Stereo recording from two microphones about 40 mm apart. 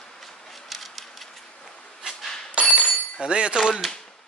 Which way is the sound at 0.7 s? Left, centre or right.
Centre.